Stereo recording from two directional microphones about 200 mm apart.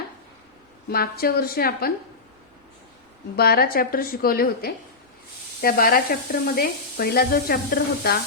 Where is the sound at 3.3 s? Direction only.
50° left (ahead or behind).